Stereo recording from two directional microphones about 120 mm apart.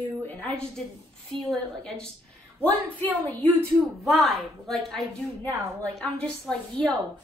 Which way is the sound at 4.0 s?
Centre (ahead or behind).